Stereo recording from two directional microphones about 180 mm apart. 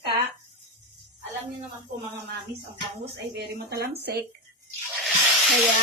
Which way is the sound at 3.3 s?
65° right (ahead or behind).